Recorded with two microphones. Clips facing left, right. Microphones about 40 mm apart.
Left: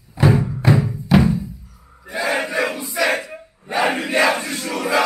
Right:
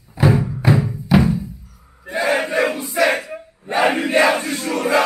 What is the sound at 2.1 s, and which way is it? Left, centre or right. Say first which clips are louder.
Battle cry: right 3 dB; right.